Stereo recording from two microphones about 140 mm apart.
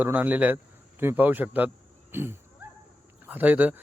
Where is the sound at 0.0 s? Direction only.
10° right (ahead or behind).